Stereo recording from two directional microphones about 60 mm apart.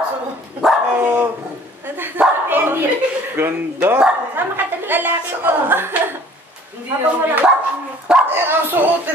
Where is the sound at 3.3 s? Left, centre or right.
Right.